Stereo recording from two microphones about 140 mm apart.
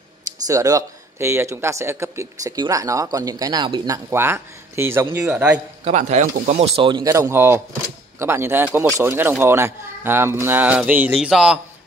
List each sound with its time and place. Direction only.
0.5 s speech: 25° right (ahead or behind); by 5.6 s 5° right (ahead or behind)
5.9 s a man's voice: 55° right (ahead or behind); by 11.6 s 5° right (ahead or behind)